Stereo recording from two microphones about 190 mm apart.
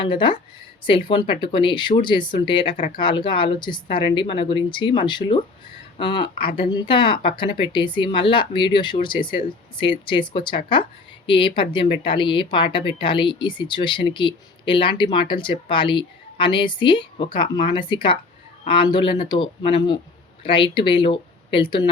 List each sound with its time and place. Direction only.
0.0 s speech: 25° left (ahead or behind)